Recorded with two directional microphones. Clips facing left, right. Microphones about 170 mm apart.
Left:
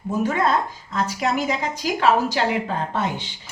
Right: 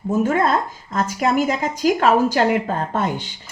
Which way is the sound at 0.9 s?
45° right (ahead or behind).